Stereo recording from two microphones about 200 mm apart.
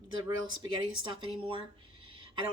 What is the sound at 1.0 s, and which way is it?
Speech, 25° right (ahead or behind).